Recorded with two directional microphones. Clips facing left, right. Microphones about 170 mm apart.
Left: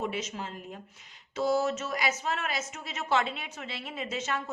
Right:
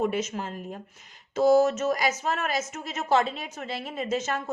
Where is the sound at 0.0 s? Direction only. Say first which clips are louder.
Right 6 dB; 45° right (ahead or behind).